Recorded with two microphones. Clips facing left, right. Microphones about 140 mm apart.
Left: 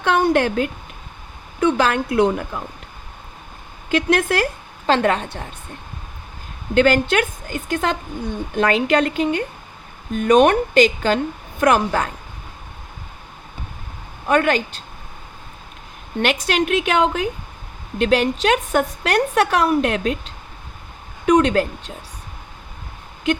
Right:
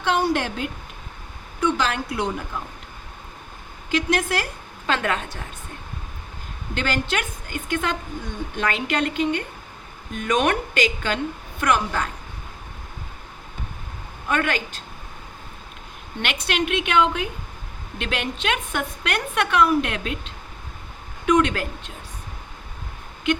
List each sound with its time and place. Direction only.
0.0 s a sound: 55° left (ahead or behind)
1.6 s a woman's voice: 55° left (ahead or behind)
3.9 s a woman's voice: 55° left (ahead or behind)
4.9 s a woman's voice: 30° left (ahead or behind)
6.7 s a woman's voice: 50° left (ahead or behind); by 11.2 s 35° left (ahead or behind)
11.6 s a woman's voice: 45° left (ahead or behind)
14.3 s a woman's voice: 35° left (ahead or behind)
16.2 s a woman's voice: 45° left (ahead or behind)
21.2 s a woman's voice: 35° left (ahead or behind)